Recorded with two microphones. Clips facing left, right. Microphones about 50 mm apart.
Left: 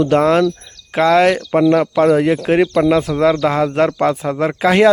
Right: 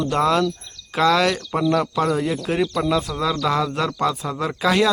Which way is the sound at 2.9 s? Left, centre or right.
Left.